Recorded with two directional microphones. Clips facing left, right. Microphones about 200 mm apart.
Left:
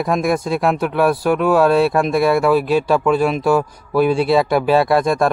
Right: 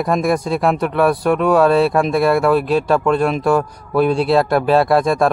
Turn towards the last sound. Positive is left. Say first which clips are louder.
# right 1 dB
turn(degrees=0)  # may be behind; listen again after turning